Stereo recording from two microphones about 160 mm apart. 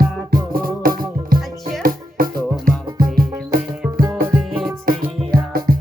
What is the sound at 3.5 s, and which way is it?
Music, 65° right (ahead or behind).